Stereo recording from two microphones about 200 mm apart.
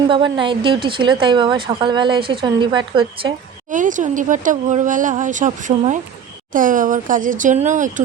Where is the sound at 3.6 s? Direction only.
40° right (ahead or behind).